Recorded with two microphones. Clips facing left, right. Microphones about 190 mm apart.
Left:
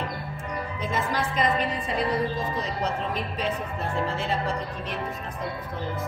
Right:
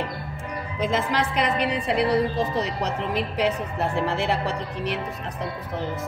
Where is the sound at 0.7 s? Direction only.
90° right; by 5.0 s 75° right (ahead or behind).